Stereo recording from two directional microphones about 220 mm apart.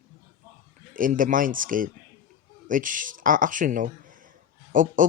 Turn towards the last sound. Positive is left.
turn(degrees=-35)  # may be behind; listen again after turning